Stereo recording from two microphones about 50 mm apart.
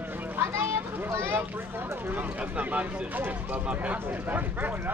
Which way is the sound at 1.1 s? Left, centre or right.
Right.